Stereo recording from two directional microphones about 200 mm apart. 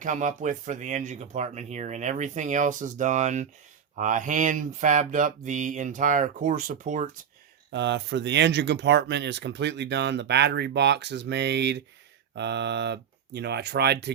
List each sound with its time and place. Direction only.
0.0 s speech: 40° right (ahead or behind)
7.7 s speech: 60° right (ahead or behind)